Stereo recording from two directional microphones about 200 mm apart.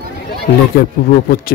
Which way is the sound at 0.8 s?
50° left (ahead or behind).